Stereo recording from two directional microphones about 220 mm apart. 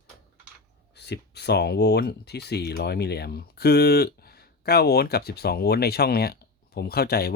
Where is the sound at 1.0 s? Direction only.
50° left (ahead or behind).